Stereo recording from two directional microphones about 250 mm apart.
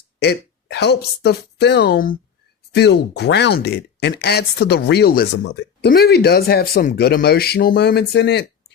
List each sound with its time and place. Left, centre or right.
0.2 s speech: left